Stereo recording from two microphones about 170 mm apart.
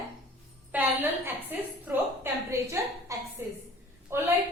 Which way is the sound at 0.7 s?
10° right (ahead or behind).